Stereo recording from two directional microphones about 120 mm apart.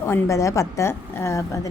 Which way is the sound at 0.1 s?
25° left (ahead or behind).